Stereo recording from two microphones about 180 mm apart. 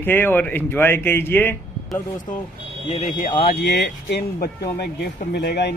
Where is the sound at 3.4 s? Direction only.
70° left (ahead or behind).